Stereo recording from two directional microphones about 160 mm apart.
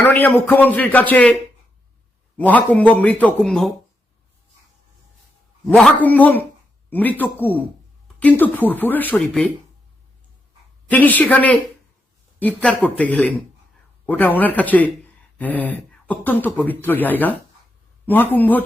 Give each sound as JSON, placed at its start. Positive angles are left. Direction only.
{"t": 0.0, "sound": "speech", "side_deg": 10}
{"t": 2.4, "sound": "speech", "side_deg": 10}
{"t": 5.6, "sound": "speech", "side_deg": 5}
{"t": 10.9, "sound": "speech", "side_deg": 10}